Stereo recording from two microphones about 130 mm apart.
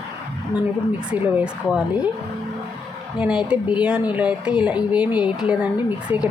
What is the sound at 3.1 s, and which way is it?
Speech, 5° right (ahead or behind).